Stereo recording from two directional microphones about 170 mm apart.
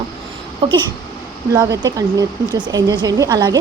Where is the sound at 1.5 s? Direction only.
20° right (ahead or behind).